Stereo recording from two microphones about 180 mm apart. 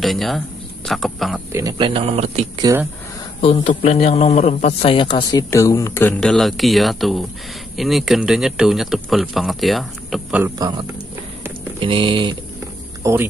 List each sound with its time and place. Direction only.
0.0 s a man's voice: centre (ahead or behind)
1.5 s speech: 20° right (ahead or behind); by 2.6 s 35° right (ahead or behind)
2.6 s speech: 15° right (ahead or behind)
3.3 s a man's voice: 30° left (ahead or behind); by 10.4 s centre (ahead or behind)
10.4 s speech: 20° right (ahead or behind)
11.8 s speech: 30° right (ahead or behind)
13.0 s speech: 15° right (ahead or behind)